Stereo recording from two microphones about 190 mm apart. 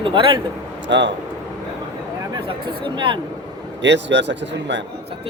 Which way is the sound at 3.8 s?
70° right (ahead or behind).